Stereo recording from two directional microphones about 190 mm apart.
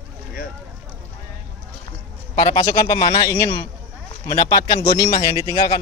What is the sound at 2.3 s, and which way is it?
A man's voice, 25° left (ahead or behind).